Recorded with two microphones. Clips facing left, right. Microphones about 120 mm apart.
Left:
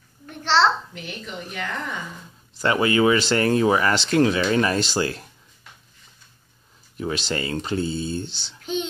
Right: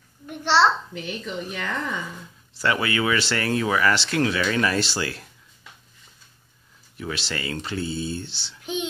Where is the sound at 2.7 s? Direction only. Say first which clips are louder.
Left 6 dB; 35° left (ahead or behind).